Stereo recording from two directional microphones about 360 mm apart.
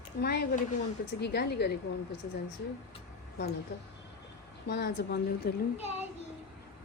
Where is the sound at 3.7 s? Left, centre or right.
Left.